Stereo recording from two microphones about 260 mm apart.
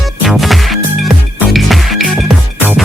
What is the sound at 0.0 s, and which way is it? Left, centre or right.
Music, centre.